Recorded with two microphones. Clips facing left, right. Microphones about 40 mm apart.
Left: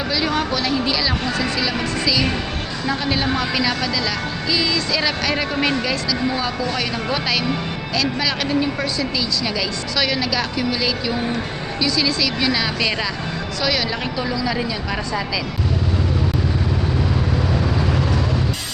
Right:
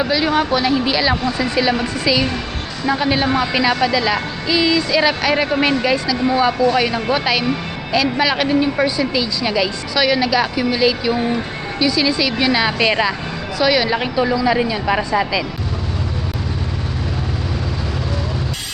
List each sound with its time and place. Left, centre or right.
0.0 s speech: centre